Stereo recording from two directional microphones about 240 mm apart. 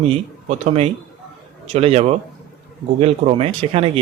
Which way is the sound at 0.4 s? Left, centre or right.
Right.